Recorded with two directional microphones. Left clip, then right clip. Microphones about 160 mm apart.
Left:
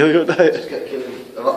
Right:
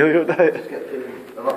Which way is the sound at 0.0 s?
20° left (ahead or behind).